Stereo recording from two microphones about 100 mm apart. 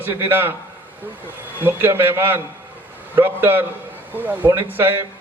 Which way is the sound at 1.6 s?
20° right (ahead or behind).